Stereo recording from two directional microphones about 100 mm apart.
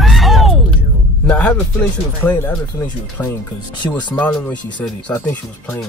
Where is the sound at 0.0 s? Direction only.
Centre (ahead or behind).